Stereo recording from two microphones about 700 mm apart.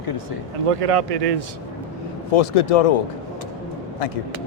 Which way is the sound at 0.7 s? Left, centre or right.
Right.